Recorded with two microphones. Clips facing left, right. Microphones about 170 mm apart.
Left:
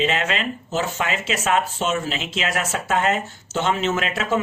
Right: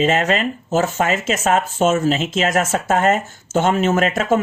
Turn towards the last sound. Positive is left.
turn(degrees=-45)  # may be behind; listen again after turning